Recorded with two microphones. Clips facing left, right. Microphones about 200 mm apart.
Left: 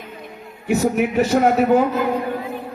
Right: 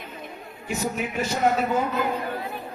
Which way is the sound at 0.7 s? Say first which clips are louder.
Left 10 dB; 65° left (ahead or behind).